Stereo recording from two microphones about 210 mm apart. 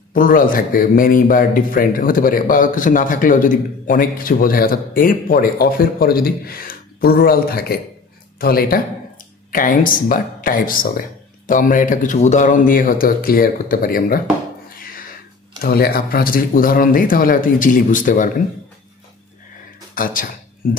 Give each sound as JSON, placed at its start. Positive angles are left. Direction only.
{"t": 0.1, "sound": "speech", "side_deg": 40}
{"t": 14.8, "sound": "a sound", "side_deg": 40}
{"t": 15.6, "sound": "speech", "side_deg": 45}
{"t": 19.9, "sound": "speech", "side_deg": 40}